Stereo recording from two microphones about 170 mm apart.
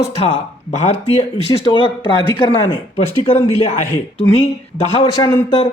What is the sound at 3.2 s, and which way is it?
Speech, 35° left (ahead or behind).